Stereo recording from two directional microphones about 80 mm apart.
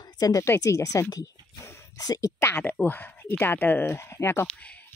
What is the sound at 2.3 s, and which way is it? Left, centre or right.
Speech, left.